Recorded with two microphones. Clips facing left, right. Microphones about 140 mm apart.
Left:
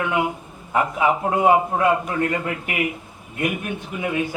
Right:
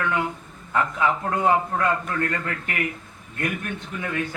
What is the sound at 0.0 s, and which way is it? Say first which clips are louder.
A man's voice: left 3 dB; 15° left (ahead or behind).